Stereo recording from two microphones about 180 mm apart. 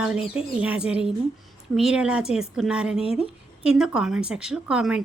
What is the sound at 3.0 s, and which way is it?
Speech, 35° left (ahead or behind).